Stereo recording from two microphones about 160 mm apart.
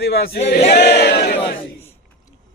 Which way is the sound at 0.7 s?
90° left.